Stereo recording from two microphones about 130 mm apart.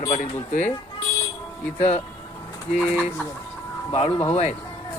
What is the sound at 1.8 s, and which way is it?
Speech, 55° left (ahead or behind).